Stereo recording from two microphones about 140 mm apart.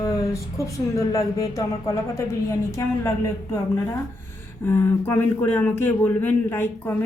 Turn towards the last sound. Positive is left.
turn(degrees=15)  # may be behind; listen again after turning